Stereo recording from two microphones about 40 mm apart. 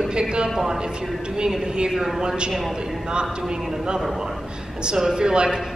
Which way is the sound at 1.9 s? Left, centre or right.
Centre.